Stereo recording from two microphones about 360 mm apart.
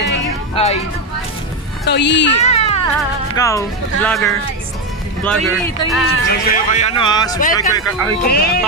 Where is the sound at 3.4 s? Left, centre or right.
Centre.